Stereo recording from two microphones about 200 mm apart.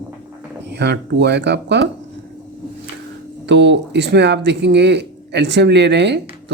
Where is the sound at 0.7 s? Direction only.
60° right (ahead or behind).